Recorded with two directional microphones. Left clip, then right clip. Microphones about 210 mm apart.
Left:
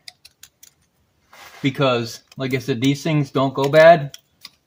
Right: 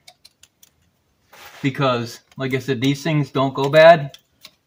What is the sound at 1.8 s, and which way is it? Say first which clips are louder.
Speech: even; 5° left (ahead or behind).